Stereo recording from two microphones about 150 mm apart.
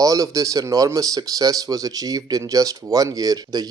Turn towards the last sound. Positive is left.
turn(degrees=-25)  # may be behind; listen again after turning